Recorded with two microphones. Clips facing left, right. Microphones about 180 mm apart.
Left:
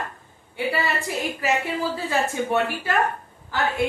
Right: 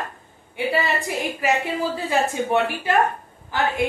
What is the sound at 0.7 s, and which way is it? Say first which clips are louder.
A woman's voice: right 3 dB; 15° right (ahead or behind).